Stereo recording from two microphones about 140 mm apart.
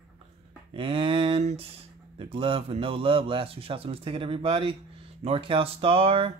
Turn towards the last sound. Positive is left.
turn(degrees=-40)  # may be behind; listen again after turning